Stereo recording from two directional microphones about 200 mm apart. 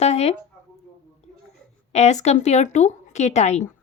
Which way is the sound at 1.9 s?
35° left (ahead or behind).